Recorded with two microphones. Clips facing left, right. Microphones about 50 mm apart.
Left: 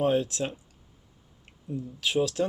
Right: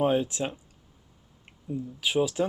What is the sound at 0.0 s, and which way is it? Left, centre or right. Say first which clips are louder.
Speech: even; centre.